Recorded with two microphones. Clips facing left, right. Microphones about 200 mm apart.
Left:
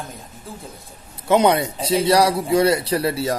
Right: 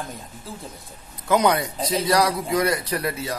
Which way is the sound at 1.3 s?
25° left (ahead or behind).